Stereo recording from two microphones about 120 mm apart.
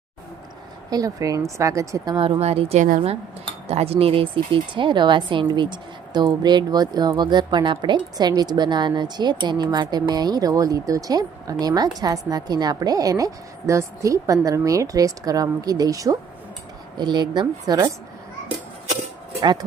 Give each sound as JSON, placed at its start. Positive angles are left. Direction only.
{"t": 0.9, "sound": "a woman's voice", "side_deg": -30}
{"t": 2.1, "sound": "speech", "side_deg": -45}
{"t": 2.4, "sound": "a woman's voice", "side_deg": -60}
{"t": 3.7, "sound": "a woman's voice", "side_deg": -55}
{"t": 19.4, "sound": "speech", "side_deg": -35}